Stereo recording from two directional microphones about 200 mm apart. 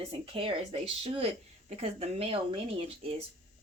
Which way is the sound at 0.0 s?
30° right (ahead or behind).